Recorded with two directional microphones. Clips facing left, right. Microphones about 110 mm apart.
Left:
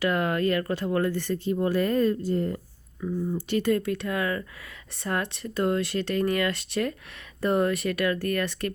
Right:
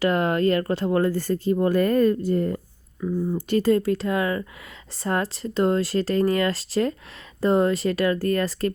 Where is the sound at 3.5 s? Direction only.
35° right (ahead or behind).